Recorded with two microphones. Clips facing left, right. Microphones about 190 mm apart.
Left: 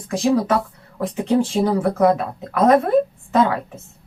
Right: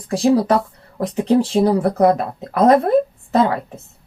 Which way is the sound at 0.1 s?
35° right (ahead or behind).